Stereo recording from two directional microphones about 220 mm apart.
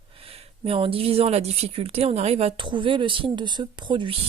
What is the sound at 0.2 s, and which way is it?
Speech, 25° right (ahead or behind).